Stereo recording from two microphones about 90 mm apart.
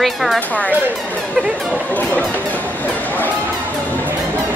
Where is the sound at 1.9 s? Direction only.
15° left (ahead or behind).